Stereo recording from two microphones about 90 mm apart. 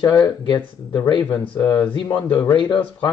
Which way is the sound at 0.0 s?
55° left (ahead or behind).